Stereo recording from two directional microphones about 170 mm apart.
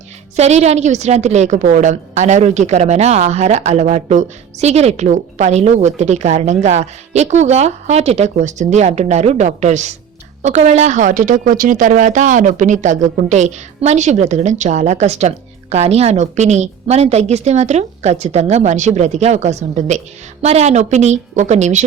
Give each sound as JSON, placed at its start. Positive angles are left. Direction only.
{"t": 0.3, "sound": "a woman's voice", "side_deg": -40}